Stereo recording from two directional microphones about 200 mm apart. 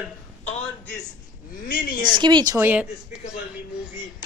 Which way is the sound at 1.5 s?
45° left (ahead or behind).